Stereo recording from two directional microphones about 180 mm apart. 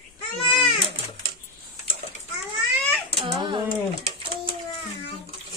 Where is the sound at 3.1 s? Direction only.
30° right (ahead or behind).